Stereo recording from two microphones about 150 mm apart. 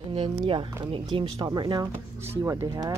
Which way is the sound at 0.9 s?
35° right (ahead or behind).